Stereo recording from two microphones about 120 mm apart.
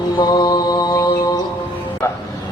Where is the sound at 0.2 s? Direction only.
35° left (ahead or behind).